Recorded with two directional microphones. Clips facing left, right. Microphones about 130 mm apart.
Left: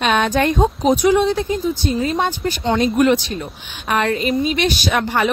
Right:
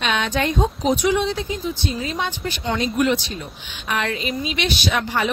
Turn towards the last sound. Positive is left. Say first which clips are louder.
# left 4 dB
turn(degrees=55)  # may be behind; listen again after turning